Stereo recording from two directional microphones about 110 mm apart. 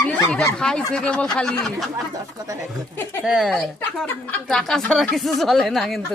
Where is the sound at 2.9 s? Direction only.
20° left (ahead or behind).